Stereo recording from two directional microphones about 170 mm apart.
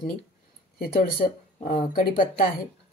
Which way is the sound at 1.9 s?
55° left (ahead or behind).